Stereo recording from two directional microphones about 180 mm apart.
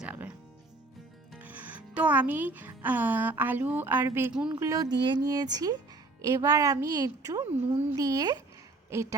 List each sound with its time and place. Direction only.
0.0 s music: 10° right (ahead or behind)
1.3 s a woman's voice: 10° right (ahead or behind)